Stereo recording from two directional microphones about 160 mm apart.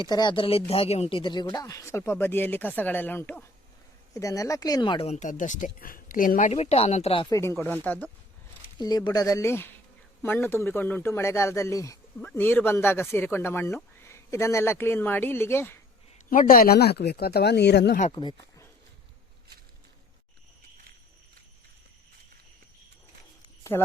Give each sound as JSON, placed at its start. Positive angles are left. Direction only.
{"t": 0.0, "sound": "a man's voice", "side_deg": 25}
{"t": 5.0, "sound": "speech", "side_deg": 50}
{"t": 6.5, "sound": "speech", "side_deg": 40}
{"t": 7.3, "sound": "a man's voice", "side_deg": 15}
{"t": 8.8, "sound": "a man's voice", "side_deg": 25}
{"t": 16.3, "sound": "speech", "side_deg": 60}
{"t": 18.1, "sound": "speech", "side_deg": 25}
{"t": 23.7, "sound": "a man's voice", "side_deg": 15}